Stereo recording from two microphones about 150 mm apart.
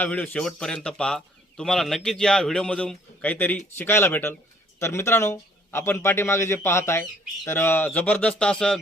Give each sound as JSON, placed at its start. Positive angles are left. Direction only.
{"t": 0.0, "sound": "a man's voice", "side_deg": 10}